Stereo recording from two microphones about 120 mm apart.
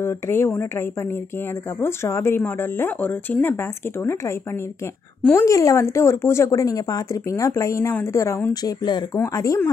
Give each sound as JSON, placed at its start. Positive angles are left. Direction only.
{"t": 0.0, "sound": "speech", "side_deg": 20}
{"t": 5.4, "sound": "speech", "side_deg": 25}